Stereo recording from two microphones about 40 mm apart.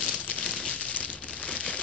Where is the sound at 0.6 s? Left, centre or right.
Left.